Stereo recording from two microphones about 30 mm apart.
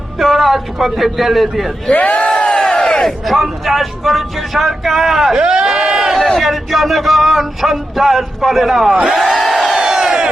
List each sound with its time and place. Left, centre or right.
0.2 s speech: centre
2.0 s crowd: left
2.4 s crowd: left
3.2 s speech: centre
5.4 s speech: right
6.1 s speech: centre
9.3 s crowd: centre
9.7 s crowd: centre